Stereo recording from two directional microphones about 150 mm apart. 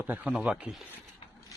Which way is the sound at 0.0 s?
5° right (ahead or behind).